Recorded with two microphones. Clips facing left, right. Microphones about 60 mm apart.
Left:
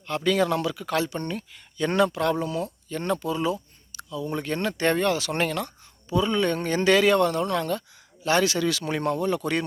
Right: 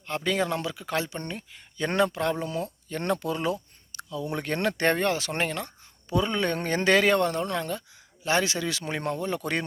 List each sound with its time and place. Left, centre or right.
0.0 s speech: right
1.9 s speech: right
2.9 s speech: right
6.1 s speech: right
7.6 s speech: centre; by 9.6 s right